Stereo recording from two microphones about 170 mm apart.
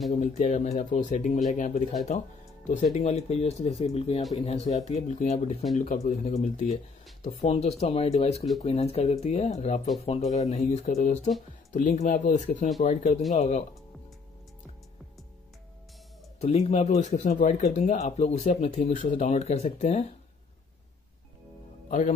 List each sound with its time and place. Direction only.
0.1 s speech: 40° left (ahead or behind)
16.3 s speech: 35° left (ahead or behind)
21.8 s speech: 50° left (ahead or behind)